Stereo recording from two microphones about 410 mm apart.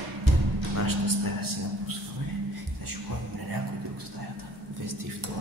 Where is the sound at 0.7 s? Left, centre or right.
Right.